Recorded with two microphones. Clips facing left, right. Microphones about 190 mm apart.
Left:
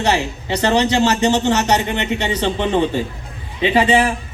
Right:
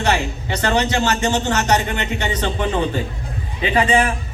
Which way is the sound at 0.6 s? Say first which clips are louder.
Left 3 dB; 30° left (ahead or behind).